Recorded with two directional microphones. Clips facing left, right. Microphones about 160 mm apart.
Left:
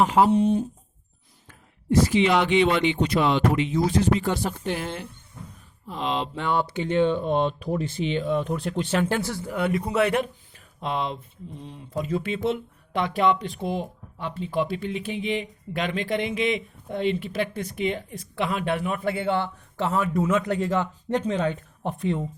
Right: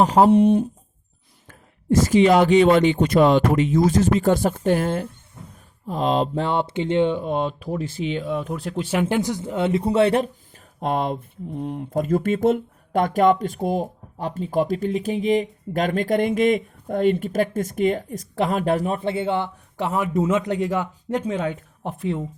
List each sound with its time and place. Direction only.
0.0 s speech: 40° right (ahead or behind)
0.3 s speech: 60° right (ahead or behind)
1.5 s speech: 45° right (ahead or behind)
6.5 s speech: 25° right (ahead or behind); by 22.2 s 5° right (ahead or behind)